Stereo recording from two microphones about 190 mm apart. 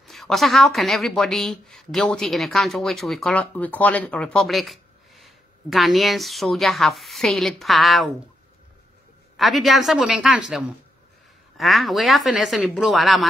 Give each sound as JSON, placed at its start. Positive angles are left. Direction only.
{"t": 0.0, "sound": "a woman's voice", "side_deg": 0}
{"t": 9.4, "sound": "a woman's voice", "side_deg": 0}
{"t": 11.5, "sound": "a woman's voice", "side_deg": 0}